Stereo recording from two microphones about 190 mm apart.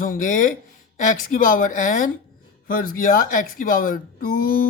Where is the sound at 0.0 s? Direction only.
45° left (ahead or behind).